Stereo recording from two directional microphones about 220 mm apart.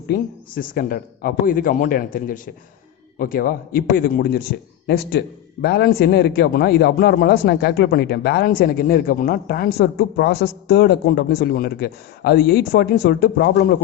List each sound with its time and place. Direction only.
0.1 s a man's voice: 40° left (ahead or behind)